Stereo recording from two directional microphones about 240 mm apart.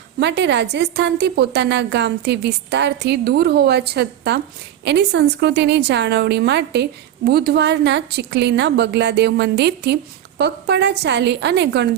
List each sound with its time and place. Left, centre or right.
0.2 s a woman's voice: right